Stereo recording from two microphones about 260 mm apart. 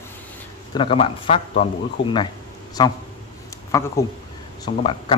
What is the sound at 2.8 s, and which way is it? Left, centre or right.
Speech, centre.